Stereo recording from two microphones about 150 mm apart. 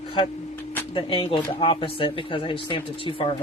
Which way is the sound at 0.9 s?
40° left (ahead or behind).